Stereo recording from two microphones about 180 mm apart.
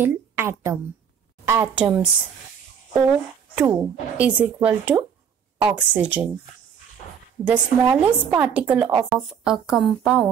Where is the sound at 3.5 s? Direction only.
10° right (ahead or behind).